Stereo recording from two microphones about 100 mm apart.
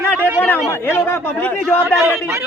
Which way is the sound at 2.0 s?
25° right (ahead or behind).